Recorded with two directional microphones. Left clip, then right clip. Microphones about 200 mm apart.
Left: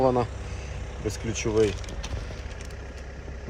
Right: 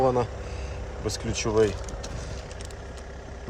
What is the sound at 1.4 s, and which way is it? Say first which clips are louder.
Speech: right 1 dB; 5° right (ahead or behind).